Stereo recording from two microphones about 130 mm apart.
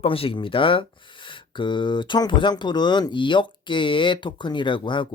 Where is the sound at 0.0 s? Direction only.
45° left (ahead or behind).